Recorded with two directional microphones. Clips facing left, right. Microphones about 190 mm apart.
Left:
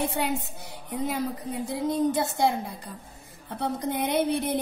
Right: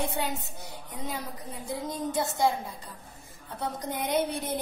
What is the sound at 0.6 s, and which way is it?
Speech, 65° left (ahead or behind).